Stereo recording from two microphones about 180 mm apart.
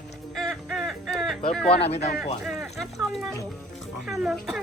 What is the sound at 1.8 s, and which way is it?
Speech, 35° left (ahead or behind).